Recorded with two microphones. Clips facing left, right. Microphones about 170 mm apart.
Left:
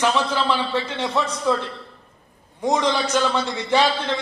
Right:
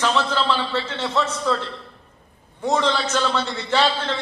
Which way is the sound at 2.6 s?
10° left (ahead or behind).